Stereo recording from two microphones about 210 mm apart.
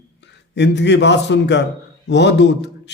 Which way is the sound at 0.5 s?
55° left (ahead or behind).